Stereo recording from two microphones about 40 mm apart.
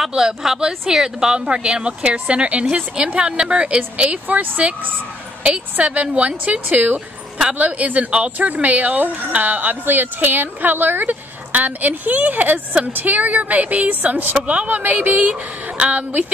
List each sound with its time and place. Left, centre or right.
0.1 s a woman's voice: centre; by 14.3 s right
14.3 s speech: right
14.7 s a woman's voice: right